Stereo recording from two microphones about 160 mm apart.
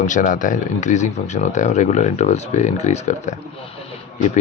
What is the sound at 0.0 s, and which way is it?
Speech, 55° left (ahead or behind).